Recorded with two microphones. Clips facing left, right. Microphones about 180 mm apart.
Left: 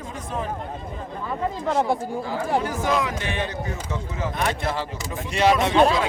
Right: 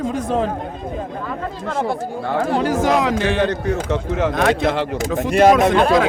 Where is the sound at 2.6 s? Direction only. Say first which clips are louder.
Right 7 dB; 90° right.